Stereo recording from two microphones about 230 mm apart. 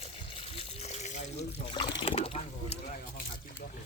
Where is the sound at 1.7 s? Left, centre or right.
Centre.